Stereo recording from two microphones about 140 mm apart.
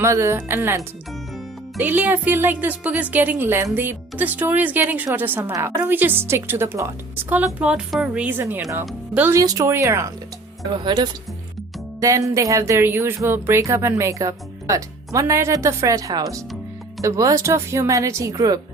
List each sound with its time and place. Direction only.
0.0 s a woman's voice: 20° right (ahead or behind)
1.8 s a woman's voice: 10° right (ahead or behind)
7.4 s a woman's voice: 5° right (ahead or behind)
9.3 s speech: 20° right (ahead or behind)
10.8 s speech: 30° right (ahead or behind)